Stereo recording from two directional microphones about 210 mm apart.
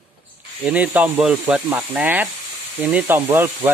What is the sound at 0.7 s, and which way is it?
Speech, 5° right (ahead or behind).